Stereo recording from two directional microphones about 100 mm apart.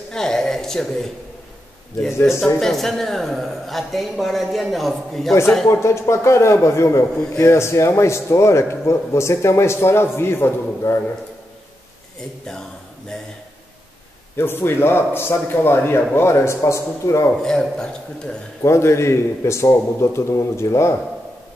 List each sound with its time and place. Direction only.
0.1 s a man's voice: 5° left (ahead or behind)
2.4 s speech: 5° left (ahead or behind)
5.7 s a man's voice: 30° left (ahead or behind)
14.3 s a man's voice: 25° left (ahead or behind)
17.4 s speech: 5° left (ahead or behind)
18.6 s a man's voice: 25° left (ahead or behind)